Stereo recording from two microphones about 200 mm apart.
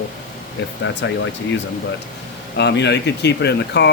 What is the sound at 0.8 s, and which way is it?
Speech, 65° left (ahead or behind).